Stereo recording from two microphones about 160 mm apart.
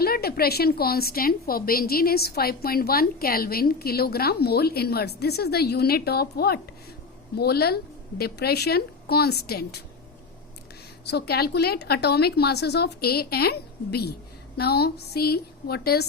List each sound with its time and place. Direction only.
0.0 s a woman's voice: 75° left (ahead or behind)
11.1 s speech: 80° left